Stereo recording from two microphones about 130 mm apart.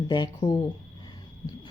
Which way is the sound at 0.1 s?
30° left (ahead or behind).